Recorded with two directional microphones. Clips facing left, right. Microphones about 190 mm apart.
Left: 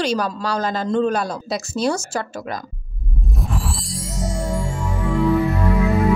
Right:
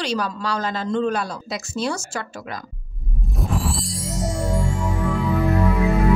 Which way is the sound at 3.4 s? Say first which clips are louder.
Right 3 dB; centre (ahead or behind).